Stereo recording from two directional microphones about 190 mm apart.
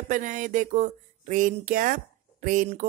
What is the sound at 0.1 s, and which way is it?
Speech, 45° right (ahead or behind).